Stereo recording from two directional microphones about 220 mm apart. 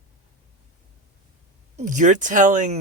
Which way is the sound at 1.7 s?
35° right (ahead or behind).